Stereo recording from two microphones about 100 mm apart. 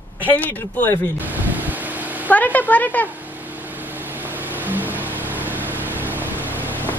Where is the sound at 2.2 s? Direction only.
15° left (ahead or behind).